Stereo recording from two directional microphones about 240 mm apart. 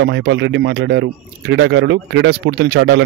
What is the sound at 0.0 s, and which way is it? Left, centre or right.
Speech, right.